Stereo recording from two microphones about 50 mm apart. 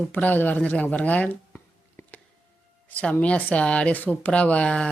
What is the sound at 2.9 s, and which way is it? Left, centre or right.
Music, left.